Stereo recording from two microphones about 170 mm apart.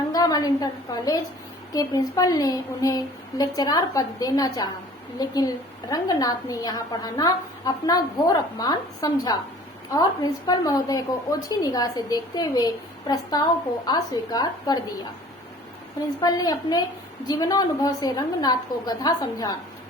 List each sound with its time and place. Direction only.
0.1 s a woman's voice: 20° left (ahead or behind)
16.2 s a woman's voice: 20° left (ahead or behind)